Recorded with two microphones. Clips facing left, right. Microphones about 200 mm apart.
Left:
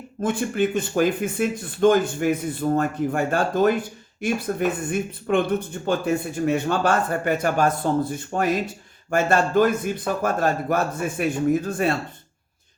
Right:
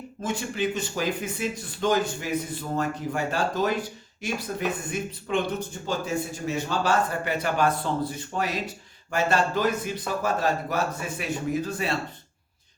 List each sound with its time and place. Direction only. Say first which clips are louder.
0.2 s speech: left 6 dB; 55° left (ahead or behind)